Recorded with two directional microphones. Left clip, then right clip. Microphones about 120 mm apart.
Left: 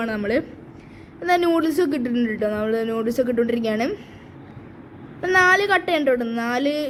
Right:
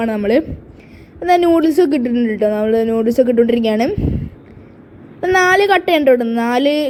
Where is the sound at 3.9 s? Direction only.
30° right (ahead or behind).